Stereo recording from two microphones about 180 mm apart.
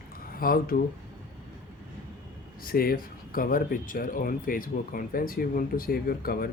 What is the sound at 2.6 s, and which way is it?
Speech, 55° left (ahead or behind).